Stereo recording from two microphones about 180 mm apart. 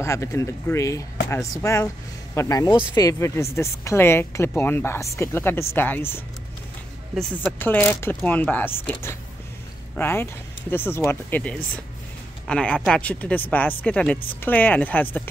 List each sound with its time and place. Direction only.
0.0 s speech: 15° left (ahead or behind)